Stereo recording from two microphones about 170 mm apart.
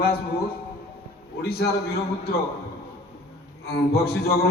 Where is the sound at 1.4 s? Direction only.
70° left (ahead or behind).